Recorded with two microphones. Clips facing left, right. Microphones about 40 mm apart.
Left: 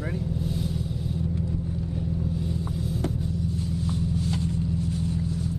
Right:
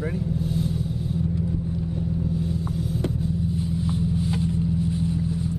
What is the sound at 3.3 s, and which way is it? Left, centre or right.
Vehicle, right.